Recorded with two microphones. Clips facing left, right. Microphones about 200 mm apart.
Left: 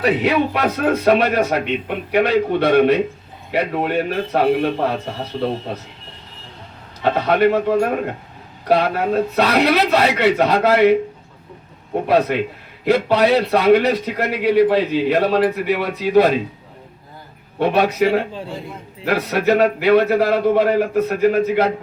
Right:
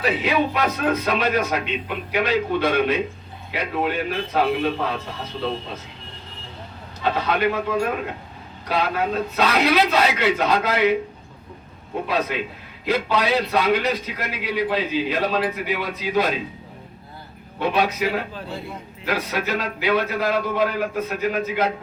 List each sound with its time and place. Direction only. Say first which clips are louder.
0.0 s a man's voice: left 4 dB; 65° left (ahead or behind)
7.0 s a man's voice: left 6 dB; 65° left (ahead or behind)
7.9 s speech: left 5 dB; 50° left (ahead or behind)
8.6 s a man's voice: left 6 dB; 60° left (ahead or behind)
12.0 s a man's voice: left 8 dB; 60° left (ahead or behind)
17.6 s a man's voice: left 6 dB; 65° left (ahead or behind)